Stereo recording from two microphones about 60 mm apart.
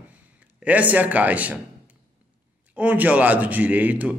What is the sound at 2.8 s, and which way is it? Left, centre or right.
A man's voice, right.